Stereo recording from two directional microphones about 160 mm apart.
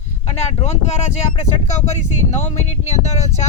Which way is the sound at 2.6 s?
45° left (ahead or behind).